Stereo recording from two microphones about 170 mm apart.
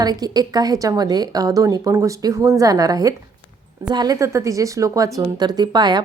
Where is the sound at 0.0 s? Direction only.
25° right (ahead or behind).